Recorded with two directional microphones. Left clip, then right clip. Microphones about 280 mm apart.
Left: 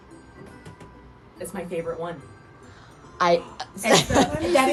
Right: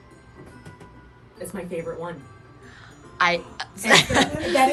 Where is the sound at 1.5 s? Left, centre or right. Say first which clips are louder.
Left 1 dB; centre.